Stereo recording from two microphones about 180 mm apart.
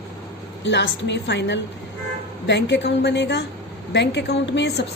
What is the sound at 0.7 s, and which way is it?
A woman's voice, 80° left.